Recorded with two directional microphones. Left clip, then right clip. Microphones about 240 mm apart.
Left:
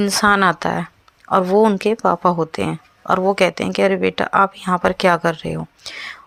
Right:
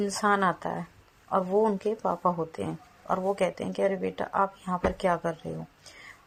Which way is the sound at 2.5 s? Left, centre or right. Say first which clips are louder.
Left 12 dB; left.